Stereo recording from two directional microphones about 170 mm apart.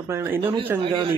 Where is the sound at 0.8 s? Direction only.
30° right (ahead or behind).